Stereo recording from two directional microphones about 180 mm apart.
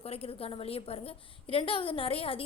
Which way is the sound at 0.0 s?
30° left (ahead or behind).